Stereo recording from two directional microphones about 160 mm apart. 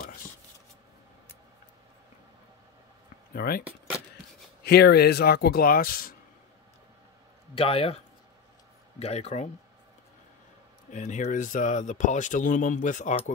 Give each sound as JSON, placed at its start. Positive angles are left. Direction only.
{"t": 3.3, "sound": "speech", "side_deg": 70}
{"t": 4.6, "sound": "a man's voice", "side_deg": 90}
{"t": 7.5, "sound": "speech", "side_deg": 35}
{"t": 9.0, "sound": "speech", "side_deg": 40}
{"t": 10.9, "sound": "speech", "side_deg": 50}